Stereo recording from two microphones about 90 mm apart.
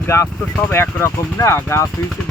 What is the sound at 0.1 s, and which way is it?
Speech, 30° left (ahead or behind).